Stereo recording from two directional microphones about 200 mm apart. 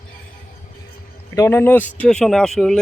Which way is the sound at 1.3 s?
15° left (ahead or behind).